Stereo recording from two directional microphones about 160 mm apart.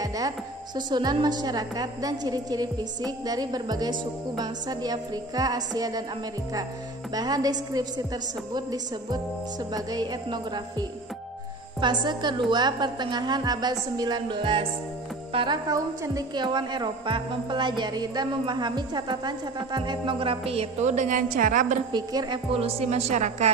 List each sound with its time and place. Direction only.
0.7 s a woman's voice: 25° right (ahead or behind)
7.2 s a woman's voice: 25° right (ahead or behind)
9.8 s a woman's voice: 25° right (ahead or behind); by 21.7 s 55° right (ahead or behind)
21.9 s a woman's voice: 25° right (ahead or behind); by 23.5 s 45° right (ahead or behind)